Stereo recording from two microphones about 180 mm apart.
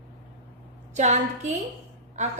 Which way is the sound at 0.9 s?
40° right (ahead or behind).